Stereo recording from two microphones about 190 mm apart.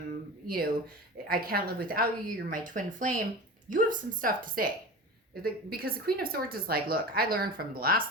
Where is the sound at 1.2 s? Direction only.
50° right (ahead or behind).